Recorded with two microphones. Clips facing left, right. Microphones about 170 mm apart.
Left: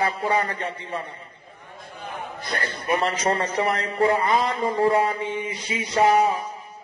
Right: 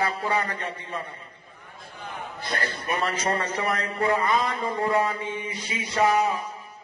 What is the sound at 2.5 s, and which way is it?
Speech, 25° left (ahead or behind).